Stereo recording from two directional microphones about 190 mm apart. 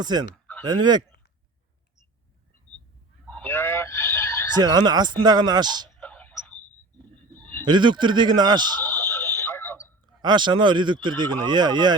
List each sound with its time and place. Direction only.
0.0 s speech: 20° right (ahead or behind)
3.2 s a sound: 10° left (ahead or behind)
4.5 s speech: 20° right (ahead or behind)
6.0 s a sound: 10° left (ahead or behind)
7.6 s speech: 25° right (ahead or behind)
8.8 s radio: 10° left (ahead or behind)
10.2 s speech: 25° right (ahead or behind)